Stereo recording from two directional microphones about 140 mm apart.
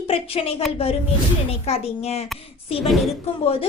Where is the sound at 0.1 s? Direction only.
45° left (ahead or behind).